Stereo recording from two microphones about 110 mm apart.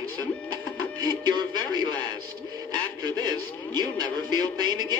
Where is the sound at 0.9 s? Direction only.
40° right (ahead or behind).